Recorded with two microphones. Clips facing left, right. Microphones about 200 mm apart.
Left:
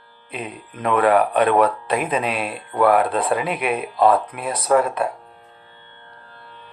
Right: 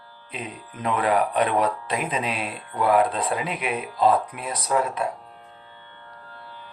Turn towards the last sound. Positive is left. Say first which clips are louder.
# left 6 dB
turn(degrees=60)  # may be behind; listen again after turning